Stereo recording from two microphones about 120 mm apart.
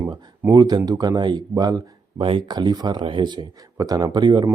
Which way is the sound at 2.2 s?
50° right (ahead or behind).